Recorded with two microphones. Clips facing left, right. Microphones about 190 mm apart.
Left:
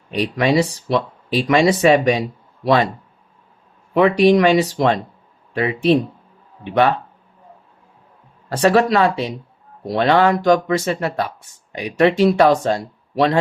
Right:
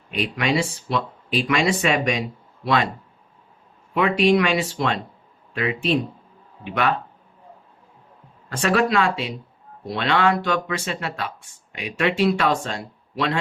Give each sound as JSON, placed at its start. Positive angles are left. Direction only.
{"t": 0.1, "sound": "speech", "side_deg": 35}
{"t": 3.9, "sound": "speech", "side_deg": 35}
{"t": 8.5, "sound": "speech", "side_deg": 35}